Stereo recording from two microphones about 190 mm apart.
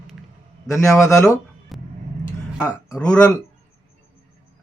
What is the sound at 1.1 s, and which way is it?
Speech, 15° left (ahead or behind).